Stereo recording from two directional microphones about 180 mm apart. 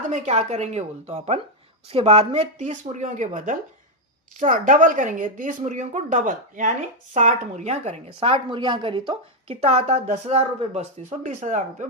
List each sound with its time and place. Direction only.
0.1 s a woman's voice: 40° right (ahead or behind)